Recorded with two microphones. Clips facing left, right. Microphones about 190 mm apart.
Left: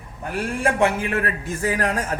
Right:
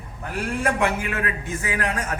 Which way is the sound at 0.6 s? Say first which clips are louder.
Left 3 dB; 25° left (ahead or behind).